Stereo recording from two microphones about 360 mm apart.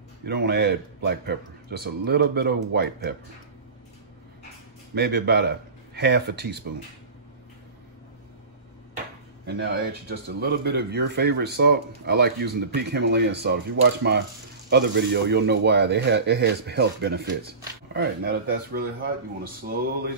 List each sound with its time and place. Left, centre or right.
0.2 s speech: right
4.9 s speech: right
9.5 s speech: right